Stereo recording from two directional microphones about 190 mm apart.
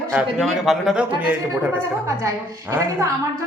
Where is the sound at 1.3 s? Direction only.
10° right (ahead or behind).